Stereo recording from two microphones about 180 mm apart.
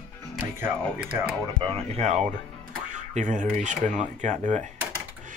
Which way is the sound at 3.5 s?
45° right (ahead or behind).